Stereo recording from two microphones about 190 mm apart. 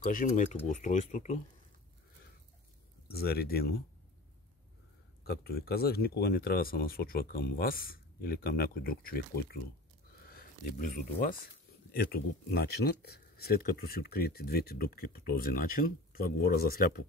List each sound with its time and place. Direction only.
0.0 s speech: 45° left (ahead or behind)
3.1 s speech: 55° left (ahead or behind)
5.2 s speech: 55° left (ahead or behind)